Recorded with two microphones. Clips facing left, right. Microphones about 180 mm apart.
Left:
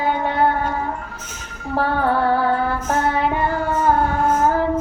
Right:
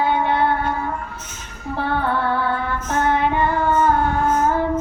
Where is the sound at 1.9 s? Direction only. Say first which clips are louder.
Left 3 dB; 40° left (ahead or behind).